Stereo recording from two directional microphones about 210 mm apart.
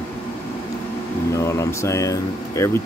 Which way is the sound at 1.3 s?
15° left (ahead or behind).